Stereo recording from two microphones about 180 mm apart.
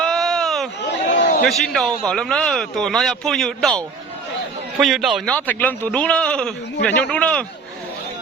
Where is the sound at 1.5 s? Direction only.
Centre (ahead or behind).